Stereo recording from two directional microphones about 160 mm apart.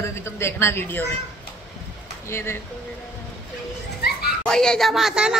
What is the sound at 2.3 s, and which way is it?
Speech, 15° left (ahead or behind).